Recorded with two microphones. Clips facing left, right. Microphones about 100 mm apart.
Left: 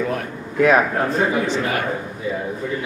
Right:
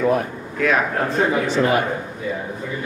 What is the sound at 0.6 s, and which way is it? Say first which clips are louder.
Speech: left 4 dB; 25° left (ahead or behind).